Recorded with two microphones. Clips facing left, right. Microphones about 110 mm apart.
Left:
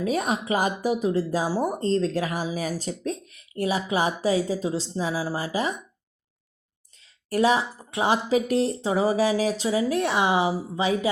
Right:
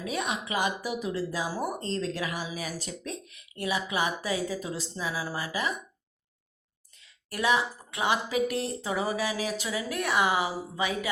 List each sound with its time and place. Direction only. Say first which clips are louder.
0.0 s speech: left 7 dB; 40° left (ahead or behind)
7.0 s speech: left 8 dB; 35° left (ahead or behind)